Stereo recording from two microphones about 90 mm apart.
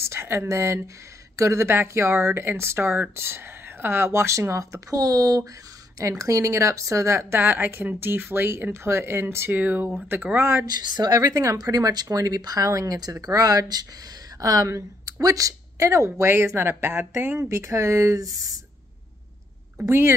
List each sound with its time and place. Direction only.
0.0 s speech: 30° right (ahead or behind)
10.6 s speech: 50° right (ahead or behind)
19.8 s speech: 30° right (ahead or behind)